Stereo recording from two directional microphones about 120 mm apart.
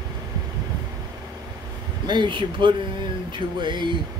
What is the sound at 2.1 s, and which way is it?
Speech, 40° right (ahead or behind).